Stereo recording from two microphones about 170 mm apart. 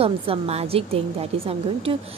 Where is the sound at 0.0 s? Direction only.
35° right (ahead or behind).